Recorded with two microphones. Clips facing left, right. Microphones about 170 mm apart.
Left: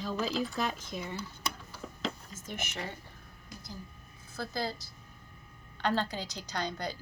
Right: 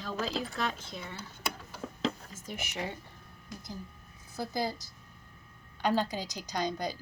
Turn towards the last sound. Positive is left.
turn(degrees=-10)  # may be behind; listen again after turning